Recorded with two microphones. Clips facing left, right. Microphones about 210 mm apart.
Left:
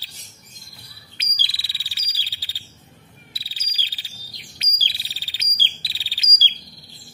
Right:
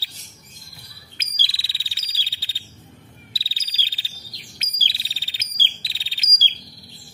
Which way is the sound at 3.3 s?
25° right (ahead or behind).